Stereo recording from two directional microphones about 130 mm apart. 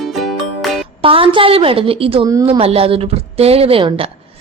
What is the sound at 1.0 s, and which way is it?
A woman's voice, 45° right (ahead or behind).